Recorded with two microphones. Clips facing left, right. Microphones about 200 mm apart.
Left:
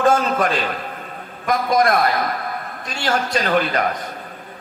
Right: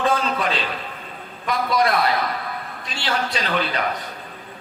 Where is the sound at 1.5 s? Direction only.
45° left (ahead or behind).